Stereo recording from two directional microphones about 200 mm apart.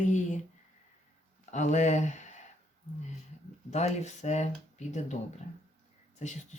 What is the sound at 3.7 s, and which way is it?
Speech, 35° left (ahead or behind).